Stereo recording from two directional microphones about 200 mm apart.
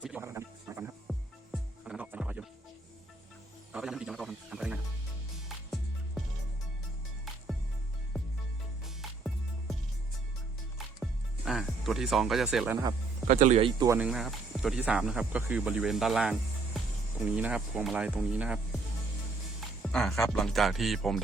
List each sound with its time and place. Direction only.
0.0 s music: 10° right (ahead or behind)
1.1 s music: centre (ahead or behind)
3.7 s music: 5° right (ahead or behind)
8.8 s music: centre (ahead or behind)
11.0 s music: centre (ahead or behind)
13.2 s speech: 35° right (ahead or behind); by 14.1 s 15° right (ahead or behind)
14.1 s speech: centre (ahead or behind)
19.8 s speech: centre (ahead or behind)